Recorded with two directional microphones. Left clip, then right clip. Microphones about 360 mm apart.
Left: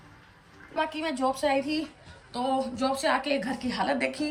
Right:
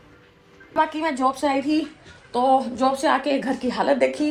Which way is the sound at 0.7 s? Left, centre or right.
Centre.